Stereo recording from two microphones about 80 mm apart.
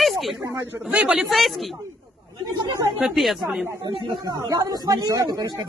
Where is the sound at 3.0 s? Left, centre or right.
Centre.